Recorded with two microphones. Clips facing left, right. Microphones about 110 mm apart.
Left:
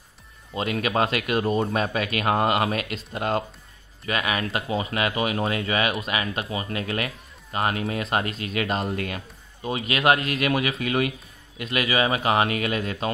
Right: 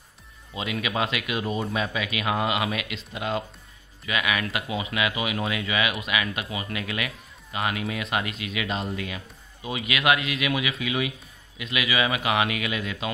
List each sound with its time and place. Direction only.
0.6 s speech: 45° left (ahead or behind)